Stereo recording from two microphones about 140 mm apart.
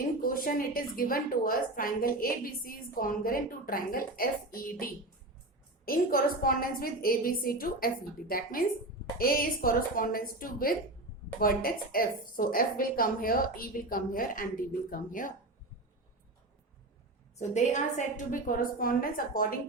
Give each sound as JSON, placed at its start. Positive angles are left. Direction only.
{"t": 0.2, "sound": "a woman's voice", "side_deg": 90}
{"t": 17.3, "sound": "a woman's voice", "side_deg": 55}